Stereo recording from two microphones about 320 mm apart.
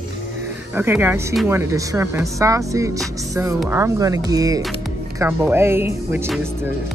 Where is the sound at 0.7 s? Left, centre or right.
Centre.